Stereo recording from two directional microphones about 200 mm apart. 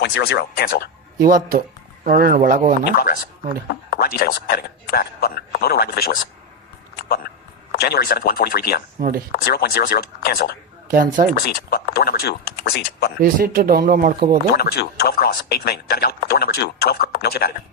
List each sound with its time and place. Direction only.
0.0 s a man's voice: 55° left (ahead or behind)
1.3 s speech: 45° right (ahead or behind)
3.7 s a man's voice: 50° left (ahead or behind)
7.7 s a man's voice: 50° left (ahead or behind)
9.0 s speech: 40° right (ahead or behind)
9.3 s a man's voice: 50° left (ahead or behind)
10.9 s speech: 45° right (ahead or behind)
11.3 s a man's voice: 50° left (ahead or behind)
13.2 s speech: 45° right (ahead or behind)
14.5 s a man's voice: 55° left (ahead or behind)